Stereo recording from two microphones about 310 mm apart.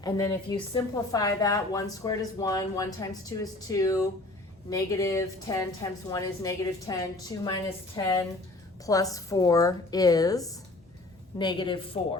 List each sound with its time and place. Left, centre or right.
0.0 s speech: centre